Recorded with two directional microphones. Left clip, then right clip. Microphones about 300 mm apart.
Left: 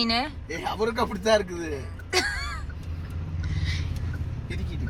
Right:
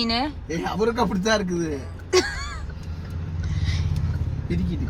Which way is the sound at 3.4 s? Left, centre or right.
Centre.